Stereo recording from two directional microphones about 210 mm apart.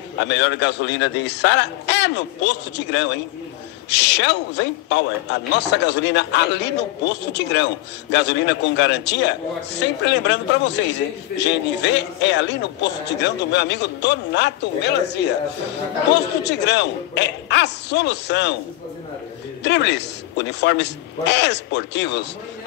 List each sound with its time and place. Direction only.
0.2 s a man's voice: 55° left (ahead or behind)
16.4 s a man's voice: 55° left (ahead or behind)
19.6 s a man's voice: 55° left (ahead or behind)